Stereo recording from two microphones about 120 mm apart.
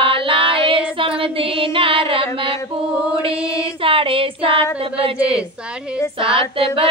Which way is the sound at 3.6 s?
50° right (ahead or behind).